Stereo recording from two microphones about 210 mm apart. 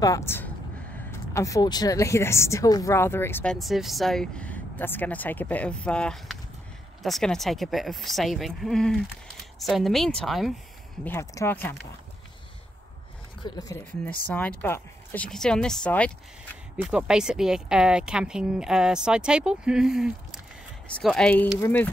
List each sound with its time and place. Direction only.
0.0 s speech: 15° left (ahead or behind)
3.5 s speech: centre (ahead or behind)
11.1 s speech: 10° left (ahead or behind)
13.4 s speech: 20° left (ahead or behind)